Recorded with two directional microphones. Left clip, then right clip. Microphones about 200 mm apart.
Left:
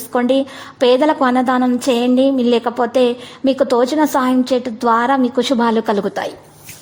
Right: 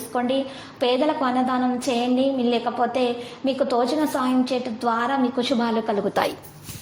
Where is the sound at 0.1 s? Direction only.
45° left (ahead or behind).